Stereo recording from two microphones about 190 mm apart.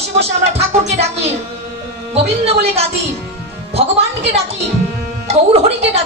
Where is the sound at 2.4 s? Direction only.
30° right (ahead or behind).